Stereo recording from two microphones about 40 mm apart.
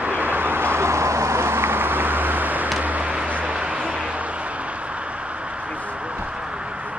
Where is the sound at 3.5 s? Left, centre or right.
Right.